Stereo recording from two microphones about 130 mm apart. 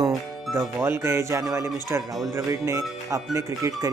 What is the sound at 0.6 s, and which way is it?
Speech, 20° right (ahead or behind).